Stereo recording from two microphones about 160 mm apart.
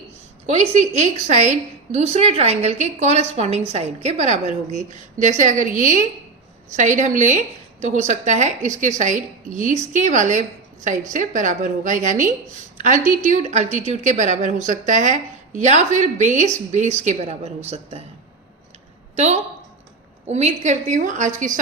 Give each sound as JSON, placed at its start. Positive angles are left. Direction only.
{"t": 0.5, "sound": "a woman's voice", "side_deg": -40}
{"t": 12.7, "sound": "a sound", "side_deg": -50}
{"t": 13.2, "sound": "a woman's voice", "side_deg": -45}
{"t": 19.1, "sound": "a woman's voice", "side_deg": -45}